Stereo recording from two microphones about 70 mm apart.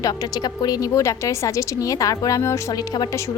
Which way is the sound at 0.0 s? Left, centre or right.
Left.